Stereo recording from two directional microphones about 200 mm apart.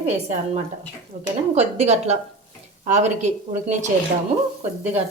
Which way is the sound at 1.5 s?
30° right (ahead or behind).